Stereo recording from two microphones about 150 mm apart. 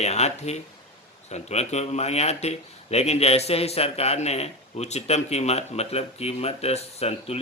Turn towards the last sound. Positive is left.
turn(degrees=45)  # may be behind; listen again after turning